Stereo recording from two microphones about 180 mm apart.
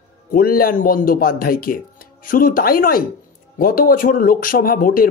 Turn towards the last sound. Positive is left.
turn(degrees=50)  # may be behind; listen again after turning